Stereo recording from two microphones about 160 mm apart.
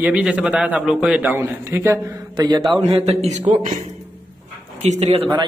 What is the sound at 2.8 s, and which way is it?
Speech, 40° right (ahead or behind).